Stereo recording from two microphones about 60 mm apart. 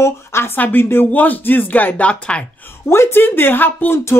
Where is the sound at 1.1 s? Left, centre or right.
Left.